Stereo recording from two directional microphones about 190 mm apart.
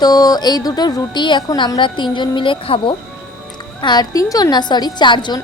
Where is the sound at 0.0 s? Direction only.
20° left (ahead or behind).